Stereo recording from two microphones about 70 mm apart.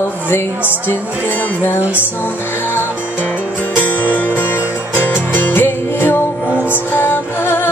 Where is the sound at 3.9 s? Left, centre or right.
Left.